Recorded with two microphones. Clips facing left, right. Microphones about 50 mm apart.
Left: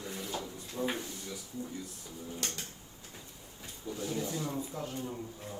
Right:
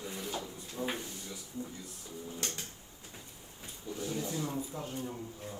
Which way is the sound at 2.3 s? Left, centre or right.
Left.